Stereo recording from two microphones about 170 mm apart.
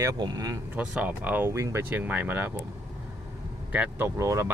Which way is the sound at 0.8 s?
10° right (ahead or behind).